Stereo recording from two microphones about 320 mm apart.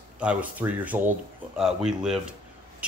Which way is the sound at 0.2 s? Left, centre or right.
Centre.